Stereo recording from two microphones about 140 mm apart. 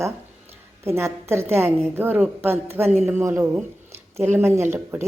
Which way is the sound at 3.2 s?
20° right (ahead or behind).